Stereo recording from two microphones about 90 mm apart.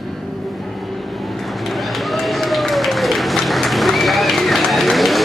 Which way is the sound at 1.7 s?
Centre (ahead or behind).